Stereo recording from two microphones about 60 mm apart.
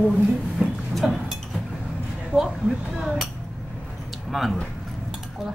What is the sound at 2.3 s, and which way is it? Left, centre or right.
Speech, centre.